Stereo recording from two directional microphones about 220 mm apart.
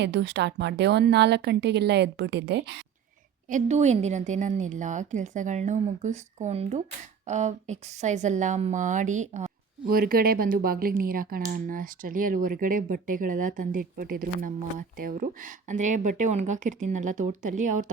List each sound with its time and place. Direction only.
0.0 s a woman's voice: 50° right (ahead or behind)
3.5 s a woman's voice: 30° right (ahead or behind)